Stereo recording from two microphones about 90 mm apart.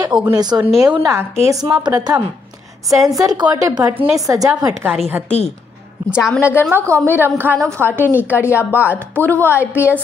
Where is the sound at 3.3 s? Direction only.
55° right (ahead or behind).